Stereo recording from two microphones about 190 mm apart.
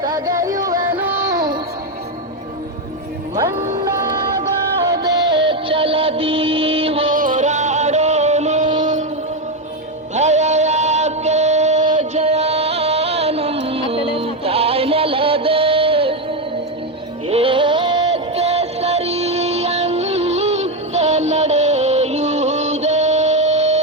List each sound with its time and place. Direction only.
0.0 s speech: 20° right (ahead or behind)
0.6 s music: 20° right (ahead or behind)
4.9 s music: 20° right (ahead or behind)
7.1 s music: 45° right (ahead or behind)
8.8 s a sound: 40° right (ahead or behind)
10.2 s music: 40° right (ahead or behind)
17.2 s music: 30° right (ahead or behind)